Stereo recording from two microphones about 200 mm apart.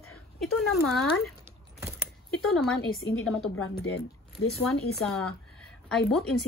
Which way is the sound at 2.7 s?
90° left.